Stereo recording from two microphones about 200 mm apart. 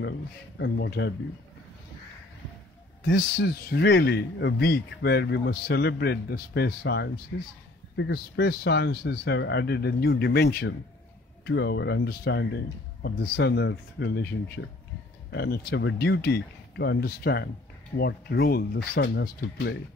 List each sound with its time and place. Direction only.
0.6 s speech: 60° left (ahead or behind)
3.0 s speech: 60° left (ahead or behind)